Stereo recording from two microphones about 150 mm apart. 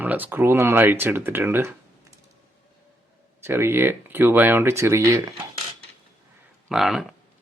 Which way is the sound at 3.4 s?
15° right (ahead or behind).